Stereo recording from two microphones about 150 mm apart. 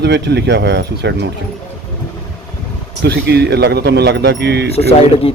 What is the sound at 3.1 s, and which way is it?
Speech, 90° right.